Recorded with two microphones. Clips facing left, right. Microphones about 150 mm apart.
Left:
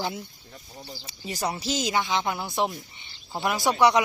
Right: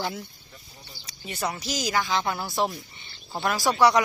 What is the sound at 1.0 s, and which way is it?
Speech, 30° left (ahead or behind).